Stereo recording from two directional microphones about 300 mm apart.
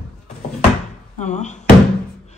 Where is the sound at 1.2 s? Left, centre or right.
Left.